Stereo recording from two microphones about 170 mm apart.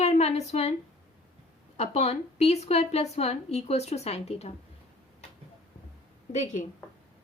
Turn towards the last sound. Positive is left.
turn(degrees=45)  # may be behind; listen again after turning